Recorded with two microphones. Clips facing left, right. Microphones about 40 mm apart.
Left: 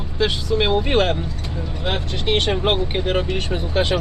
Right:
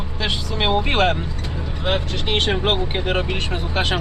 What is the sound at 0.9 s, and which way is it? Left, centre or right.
Speech, right.